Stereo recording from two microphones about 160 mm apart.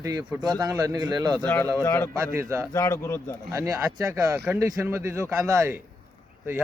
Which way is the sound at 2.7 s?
20° left (ahead or behind).